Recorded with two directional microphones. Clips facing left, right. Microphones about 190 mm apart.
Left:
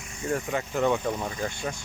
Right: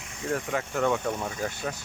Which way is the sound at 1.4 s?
5° right (ahead or behind).